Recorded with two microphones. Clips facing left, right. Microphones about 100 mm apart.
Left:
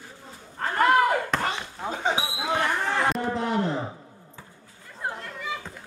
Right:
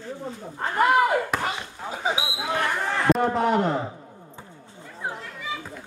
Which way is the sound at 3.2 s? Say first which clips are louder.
Right 5 dB; 55° right (ahead or behind).